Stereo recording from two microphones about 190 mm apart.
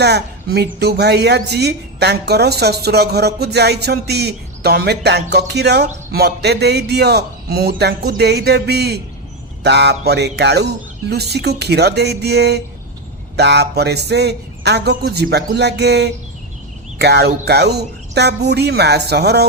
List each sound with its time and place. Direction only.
0.0 s speech: 60° right (ahead or behind)